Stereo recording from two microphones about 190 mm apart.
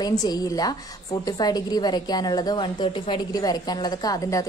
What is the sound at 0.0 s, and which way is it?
A woman's voice, 20° left (ahead or behind).